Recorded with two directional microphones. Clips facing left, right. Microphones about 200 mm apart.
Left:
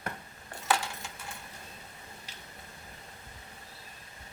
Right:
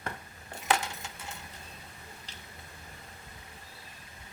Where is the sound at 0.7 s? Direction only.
20° right (ahead or behind).